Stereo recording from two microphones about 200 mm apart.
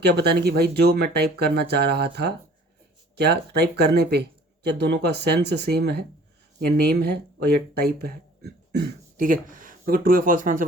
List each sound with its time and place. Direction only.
0.0 s speech: 55° right (ahead or behind)